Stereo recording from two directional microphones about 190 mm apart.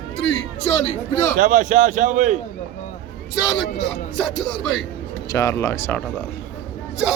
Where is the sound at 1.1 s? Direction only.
15° left (ahead or behind).